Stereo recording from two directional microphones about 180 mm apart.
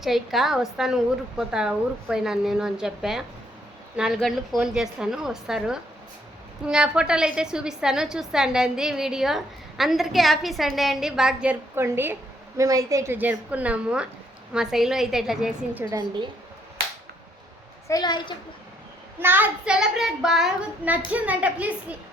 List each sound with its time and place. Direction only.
0.0 s a woman's voice: centre (ahead or behind)
17.8 s a woman's voice: 20° left (ahead or behind)
19.2 s a child's voice: 10° right (ahead or behind)